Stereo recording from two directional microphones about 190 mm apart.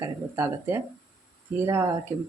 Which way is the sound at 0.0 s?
15° right (ahead or behind).